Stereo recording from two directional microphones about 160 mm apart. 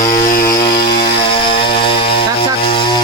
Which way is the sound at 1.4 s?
30° left (ahead or behind).